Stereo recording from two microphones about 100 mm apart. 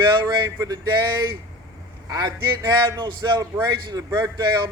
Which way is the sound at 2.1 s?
40° right (ahead or behind).